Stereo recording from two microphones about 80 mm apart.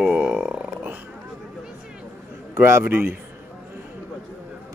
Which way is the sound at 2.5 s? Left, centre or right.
Right.